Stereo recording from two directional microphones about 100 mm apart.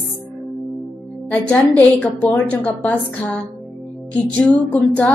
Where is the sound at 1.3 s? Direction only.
10° left (ahead or behind).